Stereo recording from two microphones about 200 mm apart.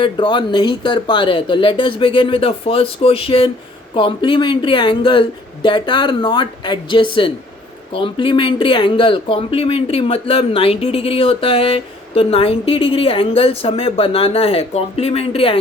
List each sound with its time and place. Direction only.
0.0 s speech: 25° left (ahead or behind)